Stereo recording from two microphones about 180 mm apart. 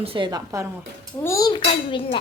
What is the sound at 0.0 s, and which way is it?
Speech, 30° right (ahead or behind).